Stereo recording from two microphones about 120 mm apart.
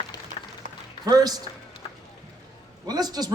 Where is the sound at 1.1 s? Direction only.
30° right (ahead or behind).